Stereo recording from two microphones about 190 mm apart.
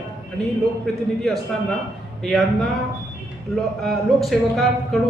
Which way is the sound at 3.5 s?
Centre (ahead or behind).